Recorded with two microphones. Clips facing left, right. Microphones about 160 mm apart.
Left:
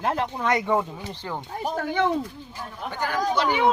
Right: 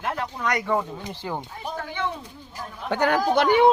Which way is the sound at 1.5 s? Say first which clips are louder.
Left 5 dB; 40° left (ahead or behind).